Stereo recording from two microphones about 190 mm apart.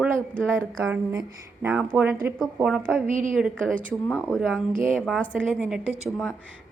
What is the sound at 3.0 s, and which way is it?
Speech, 40° right (ahead or behind).